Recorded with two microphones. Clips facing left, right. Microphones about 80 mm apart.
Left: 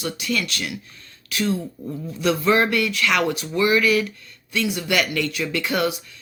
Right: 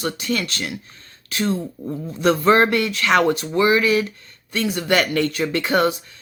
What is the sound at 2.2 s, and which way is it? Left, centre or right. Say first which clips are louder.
Speech: right 4 dB; right.